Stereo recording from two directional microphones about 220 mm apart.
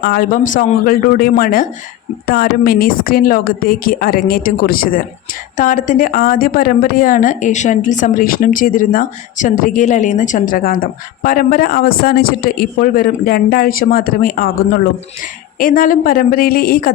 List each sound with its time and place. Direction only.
0.0 s a woman's voice: 45° left (ahead or behind)